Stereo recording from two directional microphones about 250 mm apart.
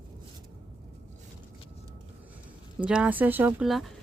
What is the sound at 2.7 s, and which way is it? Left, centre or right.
Speech, centre.